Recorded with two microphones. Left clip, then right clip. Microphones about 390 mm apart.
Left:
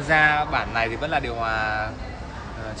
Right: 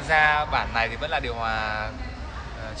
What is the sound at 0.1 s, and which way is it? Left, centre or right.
A man's voice, centre.